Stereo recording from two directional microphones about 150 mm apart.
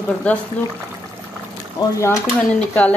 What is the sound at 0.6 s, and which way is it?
Speech, 10° left (ahead or behind).